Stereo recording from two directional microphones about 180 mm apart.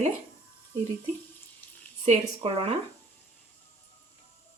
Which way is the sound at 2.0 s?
35° right (ahead or behind).